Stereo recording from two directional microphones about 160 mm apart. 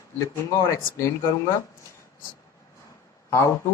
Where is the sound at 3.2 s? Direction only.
15° left (ahead or behind).